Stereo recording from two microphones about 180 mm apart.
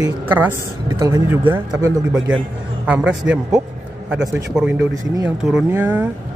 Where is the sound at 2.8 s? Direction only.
5° right (ahead or behind).